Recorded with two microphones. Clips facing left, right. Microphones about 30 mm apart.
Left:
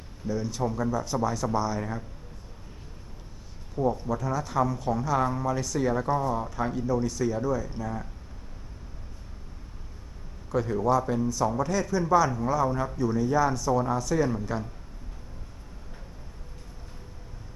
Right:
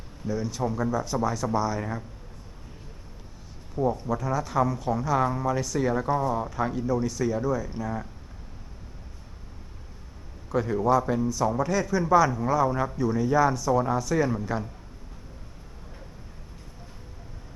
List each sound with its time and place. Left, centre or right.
0.3 s speech: centre
3.8 s speech: centre
10.5 s speech: centre